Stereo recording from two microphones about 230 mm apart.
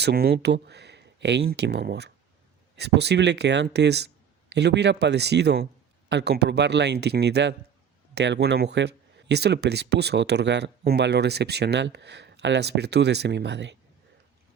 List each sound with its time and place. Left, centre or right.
0.0 s speech: right